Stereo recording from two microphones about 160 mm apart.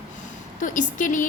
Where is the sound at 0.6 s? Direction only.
55° left (ahead or behind).